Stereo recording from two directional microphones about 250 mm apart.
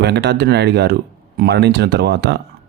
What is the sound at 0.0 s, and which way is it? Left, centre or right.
Speech, right.